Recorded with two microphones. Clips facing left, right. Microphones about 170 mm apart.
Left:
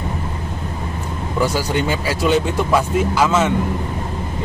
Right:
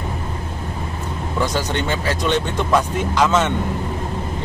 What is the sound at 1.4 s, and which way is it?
Speech, 10° left (ahead or behind).